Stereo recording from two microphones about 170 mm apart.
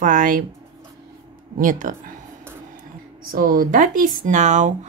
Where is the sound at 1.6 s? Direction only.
50° right (ahead or behind).